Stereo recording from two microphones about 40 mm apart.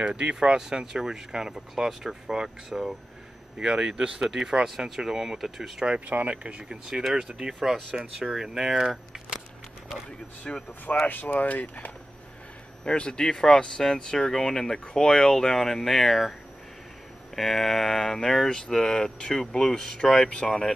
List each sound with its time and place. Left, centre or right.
0.0 s speech: right
5.9 s speech: right
7.2 s speech: right
10.5 s speech: left
11.1 s speech: left
12.8 s speech: left; by 16.3 s centre
17.4 s speech: centre